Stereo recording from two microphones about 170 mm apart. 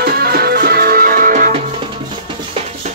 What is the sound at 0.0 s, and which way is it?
Music, 65° right (ahead or behind).